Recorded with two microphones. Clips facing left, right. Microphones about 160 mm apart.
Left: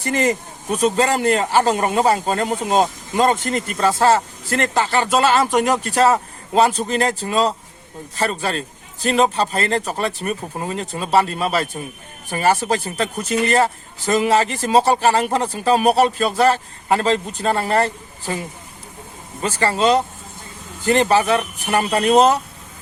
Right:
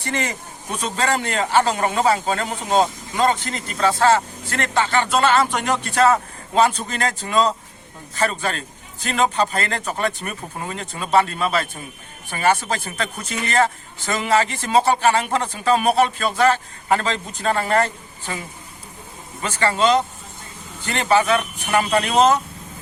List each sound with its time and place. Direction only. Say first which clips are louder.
0.0 s speech: left 7 dB; 40° left (ahead or behind)
19.4 s speech: left 2 dB; 35° left (ahead or behind)
20.8 s speech: left 3 dB; 35° left (ahead or behind)